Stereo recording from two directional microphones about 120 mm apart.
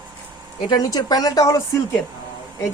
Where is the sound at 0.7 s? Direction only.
30° left (ahead or behind).